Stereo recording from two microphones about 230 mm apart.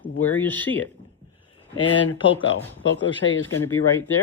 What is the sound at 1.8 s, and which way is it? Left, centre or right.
Speech, left.